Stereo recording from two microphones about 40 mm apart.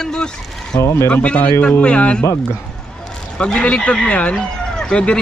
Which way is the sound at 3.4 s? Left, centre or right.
Left.